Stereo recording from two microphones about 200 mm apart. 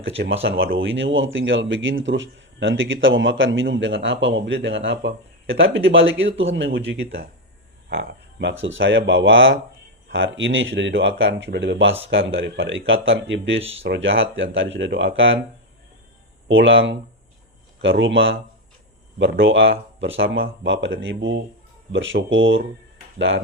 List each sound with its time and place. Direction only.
0.2 s speech: 55° right (ahead or behind)
0.8 s speech: 70° right (ahead or behind)
13.6 s speech: 30° right (ahead or behind)
13.8 s speech: 65° right (ahead or behind)
16.5 s speech: 70° right (ahead or behind)
19.2 s speech: 60° right (ahead or behind)